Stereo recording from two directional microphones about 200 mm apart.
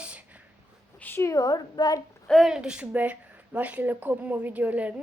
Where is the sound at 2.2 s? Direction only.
Centre (ahead or behind).